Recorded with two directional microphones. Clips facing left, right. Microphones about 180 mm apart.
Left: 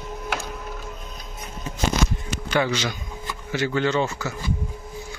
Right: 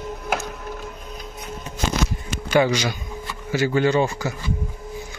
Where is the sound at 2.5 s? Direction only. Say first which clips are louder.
Right 5 dB; 10° right (ahead or behind).